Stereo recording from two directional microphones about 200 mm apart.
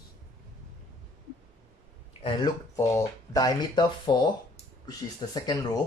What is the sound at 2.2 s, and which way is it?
Speech, 25° left (ahead or behind).